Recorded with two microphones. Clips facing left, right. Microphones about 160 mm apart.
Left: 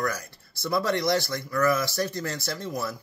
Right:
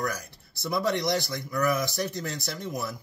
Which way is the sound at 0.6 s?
15° right (ahead or behind).